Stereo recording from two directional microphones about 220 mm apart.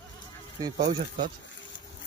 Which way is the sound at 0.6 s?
15° right (ahead or behind).